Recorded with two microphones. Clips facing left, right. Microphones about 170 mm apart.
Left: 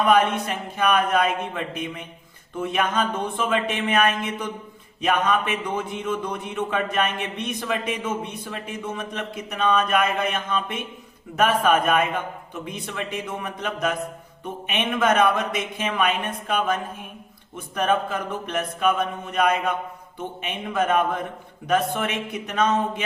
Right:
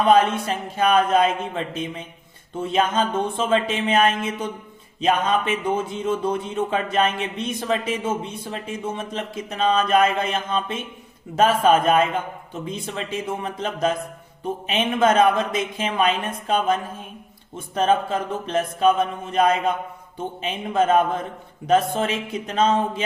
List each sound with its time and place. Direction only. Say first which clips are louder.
0.0 s a man's voice: right 2 dB; 30° right (ahead or behind)